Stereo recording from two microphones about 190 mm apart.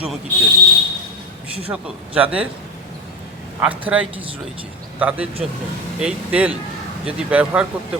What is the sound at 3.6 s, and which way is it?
A man's voice, 10° right (ahead or behind).